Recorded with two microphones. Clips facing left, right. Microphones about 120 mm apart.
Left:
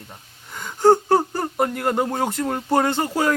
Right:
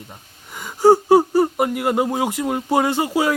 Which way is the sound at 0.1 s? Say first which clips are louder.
Right 1 dB; 5° right (ahead or behind).